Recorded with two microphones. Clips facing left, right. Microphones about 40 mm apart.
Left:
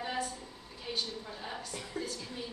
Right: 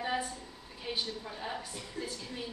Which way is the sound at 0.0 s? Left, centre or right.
Centre.